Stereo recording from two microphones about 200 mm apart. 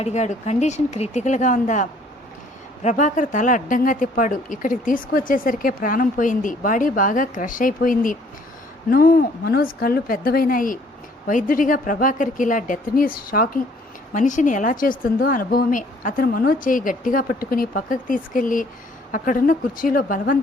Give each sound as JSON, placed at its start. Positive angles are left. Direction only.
{"t": 0.0, "sound": "a woman's voice", "side_deg": 35}